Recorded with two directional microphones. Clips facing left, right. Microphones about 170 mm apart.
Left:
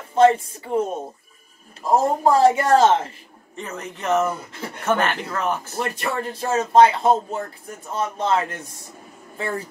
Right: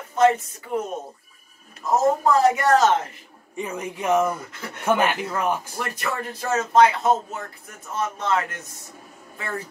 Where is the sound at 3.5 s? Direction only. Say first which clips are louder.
Right 3 dB; 10° right (ahead or behind).